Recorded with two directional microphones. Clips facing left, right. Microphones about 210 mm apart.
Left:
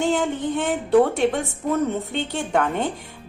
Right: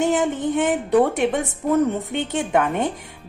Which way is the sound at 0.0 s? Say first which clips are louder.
Right 2 dB; 20° right (ahead or behind).